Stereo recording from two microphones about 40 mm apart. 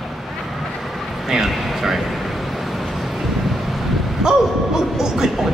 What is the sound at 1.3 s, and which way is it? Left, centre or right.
Speech, centre.